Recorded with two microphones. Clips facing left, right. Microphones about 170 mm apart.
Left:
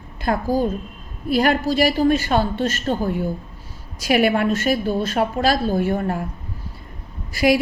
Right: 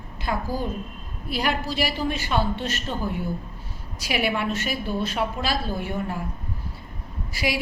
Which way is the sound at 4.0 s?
50° left (ahead or behind).